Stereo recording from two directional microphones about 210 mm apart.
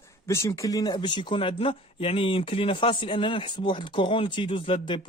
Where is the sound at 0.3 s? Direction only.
15° left (ahead or behind).